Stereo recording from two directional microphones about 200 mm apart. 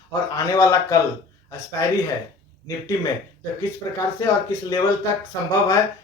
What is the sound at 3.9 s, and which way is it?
Speech, 15° left (ahead or behind).